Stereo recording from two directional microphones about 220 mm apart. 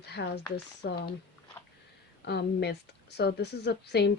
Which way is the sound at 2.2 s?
50° left (ahead or behind).